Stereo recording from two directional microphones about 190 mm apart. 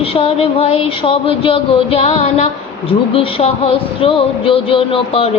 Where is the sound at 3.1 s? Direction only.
30° left (ahead or behind).